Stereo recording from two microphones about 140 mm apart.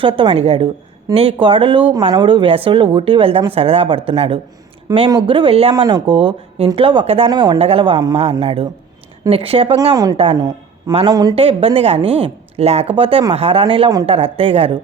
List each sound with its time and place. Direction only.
0.0 s speech: 40° right (ahead or behind)
5.7 s speech: 30° right (ahead or behind)
7.3 s speech: 30° right (ahead or behind)
7.6 s speech: 40° right (ahead or behind)
9.9 s speech: 25° right (ahead or behind)
11.3 s speech: 40° right (ahead or behind)